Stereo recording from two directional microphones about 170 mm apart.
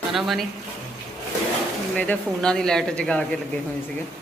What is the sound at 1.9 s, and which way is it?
Speech, 5° left (ahead or behind).